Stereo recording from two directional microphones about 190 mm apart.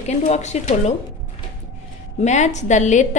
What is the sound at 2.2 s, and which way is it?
Speech, 40° left (ahead or behind).